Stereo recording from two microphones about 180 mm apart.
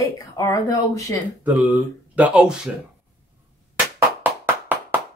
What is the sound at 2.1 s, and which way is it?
Speech, 5° right (ahead or behind).